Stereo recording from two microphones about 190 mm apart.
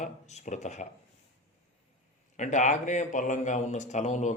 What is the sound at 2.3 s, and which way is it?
Speech, 40° left (ahead or behind).